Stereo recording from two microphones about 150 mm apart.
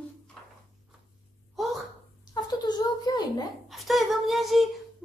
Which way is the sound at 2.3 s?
25° left (ahead or behind).